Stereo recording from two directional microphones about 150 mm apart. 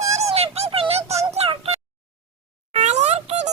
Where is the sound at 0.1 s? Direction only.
45° right (ahead or behind).